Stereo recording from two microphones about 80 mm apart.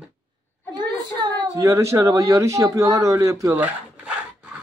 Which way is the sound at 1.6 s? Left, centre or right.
Right.